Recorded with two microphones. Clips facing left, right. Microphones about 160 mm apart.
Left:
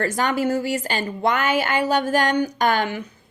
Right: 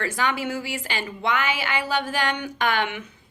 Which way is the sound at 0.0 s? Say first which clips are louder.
Left 5 dB; 45° left (ahead or behind).